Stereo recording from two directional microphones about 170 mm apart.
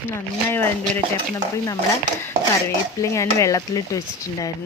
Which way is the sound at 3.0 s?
20° left (ahead or behind).